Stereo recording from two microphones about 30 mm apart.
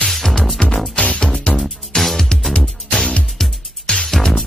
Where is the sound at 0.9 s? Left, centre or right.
Left.